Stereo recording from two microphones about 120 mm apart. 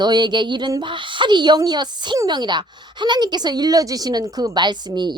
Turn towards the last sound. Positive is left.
turn(degrees=-40)  # may be behind; listen again after turning